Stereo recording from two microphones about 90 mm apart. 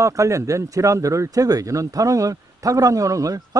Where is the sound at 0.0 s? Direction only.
35° right (ahead or behind).